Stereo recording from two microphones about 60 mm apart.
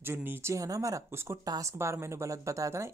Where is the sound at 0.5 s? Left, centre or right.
Right.